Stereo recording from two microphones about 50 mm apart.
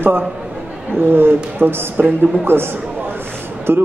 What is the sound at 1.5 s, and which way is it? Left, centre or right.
Mantra, right.